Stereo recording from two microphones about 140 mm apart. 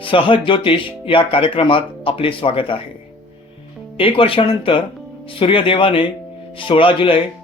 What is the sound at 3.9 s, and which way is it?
Speech, 40° left (ahead or behind).